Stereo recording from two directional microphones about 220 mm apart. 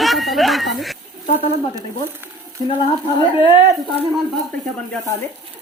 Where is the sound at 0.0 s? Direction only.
Centre (ahead or behind).